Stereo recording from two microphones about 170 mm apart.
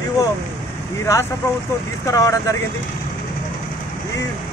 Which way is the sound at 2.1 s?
20° left (ahead or behind).